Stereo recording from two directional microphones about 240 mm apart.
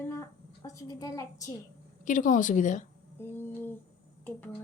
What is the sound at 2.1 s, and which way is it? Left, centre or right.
Speech, left.